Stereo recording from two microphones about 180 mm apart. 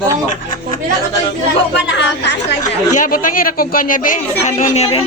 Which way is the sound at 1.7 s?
80° left.